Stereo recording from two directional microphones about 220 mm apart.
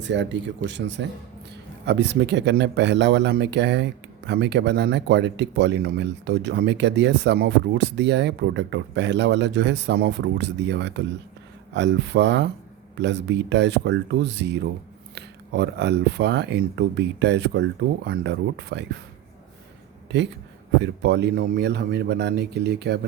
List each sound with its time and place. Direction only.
0.0 s speech: 55° right (ahead or behind)
20.8 s speech: 50° right (ahead or behind)